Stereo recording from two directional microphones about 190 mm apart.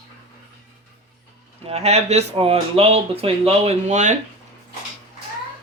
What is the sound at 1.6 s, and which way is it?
Speech, 35° right (ahead or behind).